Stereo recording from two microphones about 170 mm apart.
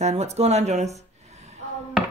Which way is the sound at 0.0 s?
40° right (ahead or behind).